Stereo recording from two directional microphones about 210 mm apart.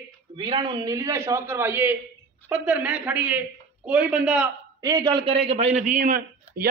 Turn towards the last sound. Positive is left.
turn(degrees=-40)  # may be behind; listen again after turning